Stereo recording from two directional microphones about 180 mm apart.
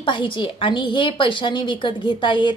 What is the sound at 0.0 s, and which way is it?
A woman's voice, 25° left (ahead or behind).